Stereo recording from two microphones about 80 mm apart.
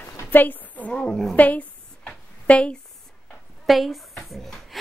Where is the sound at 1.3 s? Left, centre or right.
Centre.